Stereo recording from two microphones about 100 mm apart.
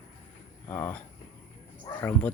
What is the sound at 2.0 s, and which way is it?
Speech, 15° left (ahead or behind).